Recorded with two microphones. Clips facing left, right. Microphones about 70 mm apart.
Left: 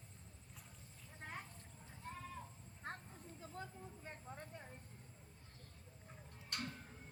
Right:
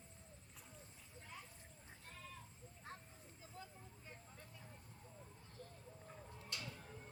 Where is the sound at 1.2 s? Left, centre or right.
Left.